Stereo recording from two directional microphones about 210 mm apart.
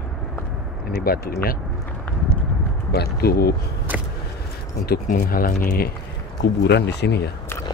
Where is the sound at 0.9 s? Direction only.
45° left (ahead or behind).